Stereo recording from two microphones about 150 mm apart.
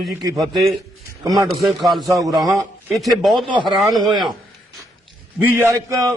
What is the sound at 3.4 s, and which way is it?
Speech, 35° right (ahead or behind).